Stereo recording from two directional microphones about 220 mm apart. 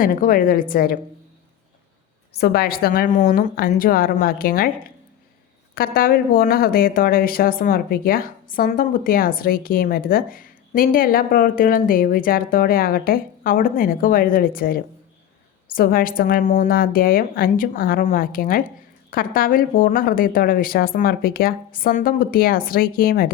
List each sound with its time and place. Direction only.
0.0 s speech: 40° left (ahead or behind)
2.4 s speech: 45° left (ahead or behind)
5.7 s speech: 40° left (ahead or behind)